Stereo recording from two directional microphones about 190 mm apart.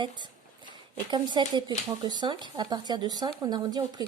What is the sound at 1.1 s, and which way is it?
Speech, 25° right (ahead or behind).